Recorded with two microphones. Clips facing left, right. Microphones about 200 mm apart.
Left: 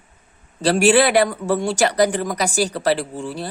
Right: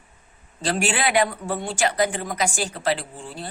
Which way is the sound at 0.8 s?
40° left (ahead or behind).